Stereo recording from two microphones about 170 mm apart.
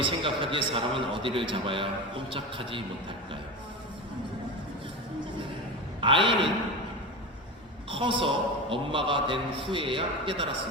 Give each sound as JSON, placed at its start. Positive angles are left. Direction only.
{"t": 0.0, "sound": "a man's voice", "side_deg": -30}
{"t": 6.0, "sound": "a man's voice", "side_deg": -30}
{"t": 7.9, "sound": "a man's voice", "side_deg": -30}